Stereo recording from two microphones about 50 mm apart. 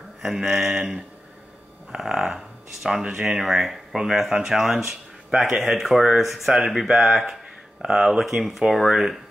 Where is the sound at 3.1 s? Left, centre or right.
Centre.